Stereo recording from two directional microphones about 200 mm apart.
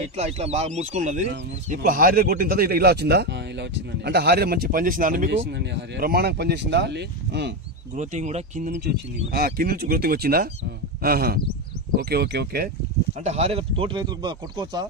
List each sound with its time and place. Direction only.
0.0 s speech: 30° right (ahead or behind)
5.3 s speech: 60° right (ahead or behind)
7.9 s speech: 35° right (ahead or behind)
8.8 s speech: 50° right (ahead or behind)
13.2 s speech: 35° right (ahead or behind)